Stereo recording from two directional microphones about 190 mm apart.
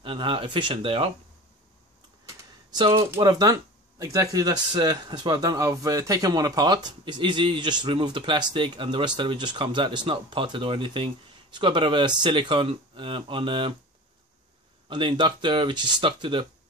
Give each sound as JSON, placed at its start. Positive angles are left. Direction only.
{"t": 0.0, "sound": "speech", "side_deg": -25}
{"t": 2.2, "sound": "a sound", "side_deg": -25}
{"t": 3.2, "sound": "speech", "side_deg": -20}
{"t": 14.9, "sound": "speech", "side_deg": -25}